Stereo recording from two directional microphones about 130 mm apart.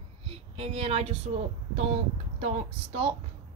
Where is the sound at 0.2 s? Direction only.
45° right (ahead or behind).